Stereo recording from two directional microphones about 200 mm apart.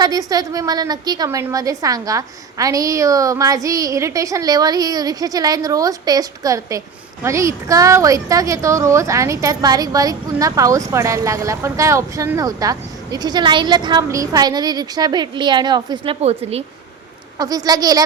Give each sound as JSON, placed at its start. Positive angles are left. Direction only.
{"t": 0.0, "sound": "a woman's voice", "side_deg": -20}
{"t": 17.3, "sound": "speech", "side_deg": -20}